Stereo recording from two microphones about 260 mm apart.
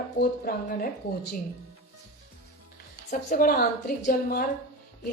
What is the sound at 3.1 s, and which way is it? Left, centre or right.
Speech, left.